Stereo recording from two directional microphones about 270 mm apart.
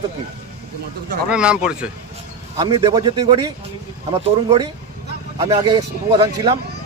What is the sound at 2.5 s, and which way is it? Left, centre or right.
Speech, centre.